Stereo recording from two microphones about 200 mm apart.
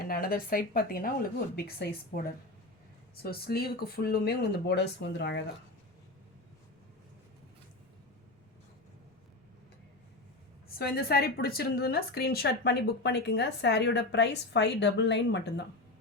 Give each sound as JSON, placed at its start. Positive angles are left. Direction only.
{"t": 0.0, "sound": "speech", "side_deg": 45}
{"t": 3.2, "sound": "speech", "side_deg": 50}
{"t": 10.7, "sound": "a woman's voice", "side_deg": 50}